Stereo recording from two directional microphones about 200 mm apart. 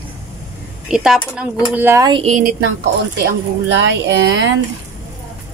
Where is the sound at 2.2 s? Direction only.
35° right (ahead or behind).